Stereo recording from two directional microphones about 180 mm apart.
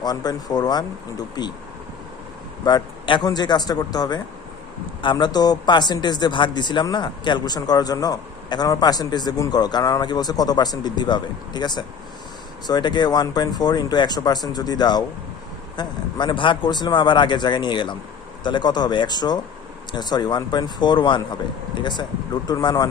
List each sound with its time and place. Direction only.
0.0 s speech: 20° left (ahead or behind)
2.6 s speech: 25° left (ahead or behind)